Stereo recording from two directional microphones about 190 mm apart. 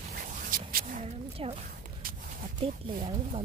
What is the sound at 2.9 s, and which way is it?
Speech, 45° right (ahead or behind).